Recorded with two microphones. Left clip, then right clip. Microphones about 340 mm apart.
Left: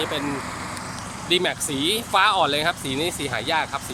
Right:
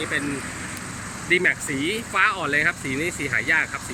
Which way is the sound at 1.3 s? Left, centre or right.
Left.